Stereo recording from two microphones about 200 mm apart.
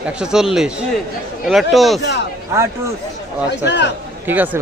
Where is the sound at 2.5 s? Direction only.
15° right (ahead or behind).